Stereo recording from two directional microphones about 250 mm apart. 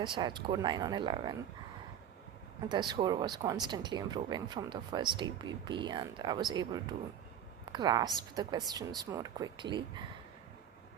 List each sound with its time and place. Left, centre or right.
0.0 s speech: centre
2.6 s speech: centre